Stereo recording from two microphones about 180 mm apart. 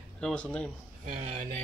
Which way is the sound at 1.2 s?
35° right (ahead or behind).